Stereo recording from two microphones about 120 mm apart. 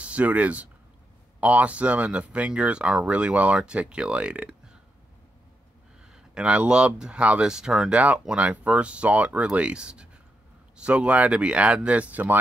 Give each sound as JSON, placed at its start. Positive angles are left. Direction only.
{"t": 0.0, "sound": "speech", "side_deg": -10}
{"t": 6.1, "sound": "speech", "side_deg": -5}